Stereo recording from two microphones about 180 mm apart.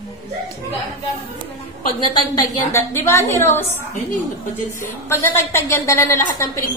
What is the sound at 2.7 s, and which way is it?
Speech, 15° left (ahead or behind).